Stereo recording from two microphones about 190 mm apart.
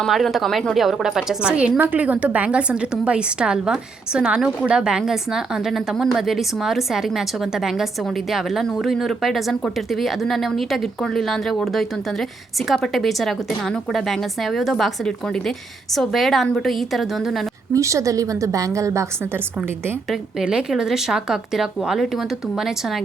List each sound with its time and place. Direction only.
0.0 s a woman's voice: centre (ahead or behind)
17.7 s a woman's voice: 15° right (ahead or behind)
20.1 s a woman's voice: 5° right (ahead or behind)